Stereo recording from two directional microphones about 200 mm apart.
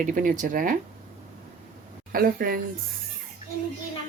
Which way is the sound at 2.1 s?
45° right (ahead or behind).